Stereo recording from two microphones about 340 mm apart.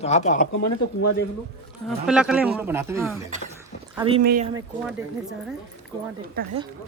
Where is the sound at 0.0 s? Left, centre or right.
Centre.